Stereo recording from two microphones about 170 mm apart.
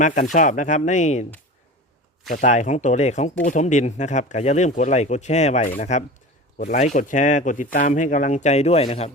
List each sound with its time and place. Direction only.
0.0 s speech: 50° left (ahead or behind)
2.3 s speech: 45° left (ahead or behind)